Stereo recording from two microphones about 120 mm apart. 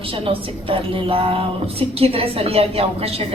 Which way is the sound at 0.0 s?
50° right (ahead or behind).